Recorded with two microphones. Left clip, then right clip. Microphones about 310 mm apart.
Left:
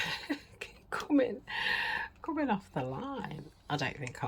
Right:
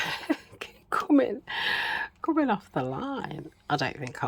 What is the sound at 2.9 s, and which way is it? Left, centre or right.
Speech, centre.